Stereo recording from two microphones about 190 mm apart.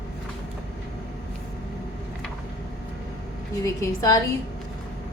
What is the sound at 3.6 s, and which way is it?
Speech, 15° left (ahead or behind).